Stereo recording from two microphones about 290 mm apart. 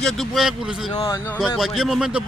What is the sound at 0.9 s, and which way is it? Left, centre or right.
Speech, centre.